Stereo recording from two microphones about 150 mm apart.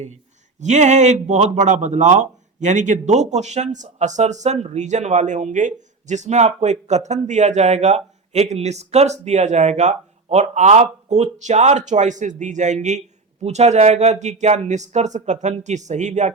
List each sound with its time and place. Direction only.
0.6 s speech: 50° right (ahead or behind)